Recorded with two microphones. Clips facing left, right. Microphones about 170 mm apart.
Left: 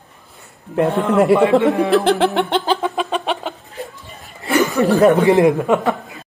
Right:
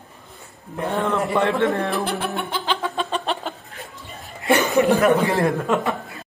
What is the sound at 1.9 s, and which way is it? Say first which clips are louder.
Chuckle: left 10 dB; 90° left.